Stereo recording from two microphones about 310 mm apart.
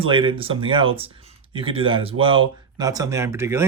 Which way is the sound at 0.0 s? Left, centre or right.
Centre.